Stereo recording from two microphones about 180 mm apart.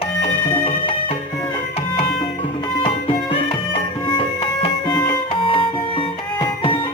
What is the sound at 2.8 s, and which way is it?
Music, 30° left (ahead or behind).